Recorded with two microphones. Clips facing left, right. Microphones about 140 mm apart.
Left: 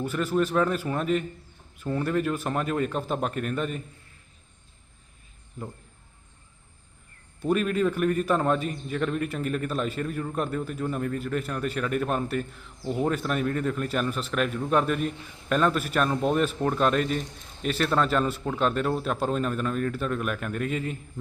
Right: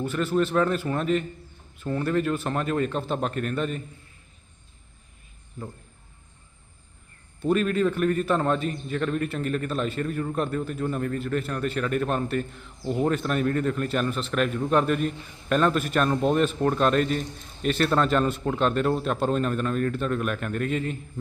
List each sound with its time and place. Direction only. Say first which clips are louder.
0.0 s a man's voice: right 1 dB; 10° left (ahead or behind)
7.4 s a man's voice: right 1 dB; 5° left (ahead or behind)